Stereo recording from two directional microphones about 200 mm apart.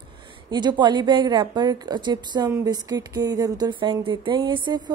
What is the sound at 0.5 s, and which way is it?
A woman's voice, 20° right (ahead or behind).